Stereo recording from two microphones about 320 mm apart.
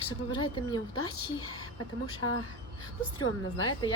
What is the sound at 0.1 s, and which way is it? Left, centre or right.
Speech, centre.